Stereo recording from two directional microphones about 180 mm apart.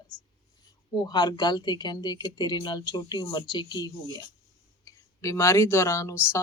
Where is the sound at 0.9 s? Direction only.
25° left (ahead or behind).